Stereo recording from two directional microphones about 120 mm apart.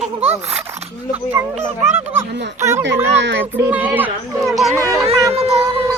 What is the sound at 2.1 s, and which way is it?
Speech, 25° right (ahead or behind).